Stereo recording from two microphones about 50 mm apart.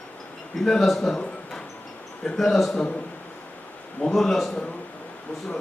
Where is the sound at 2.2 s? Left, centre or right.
Centre.